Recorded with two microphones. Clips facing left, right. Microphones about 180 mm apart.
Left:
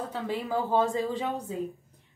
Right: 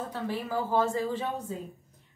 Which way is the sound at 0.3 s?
20° left (ahead or behind).